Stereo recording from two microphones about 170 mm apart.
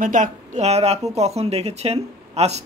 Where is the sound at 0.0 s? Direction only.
50° right (ahead or behind).